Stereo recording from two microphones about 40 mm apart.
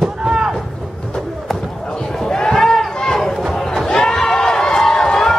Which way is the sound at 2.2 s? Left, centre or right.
Centre.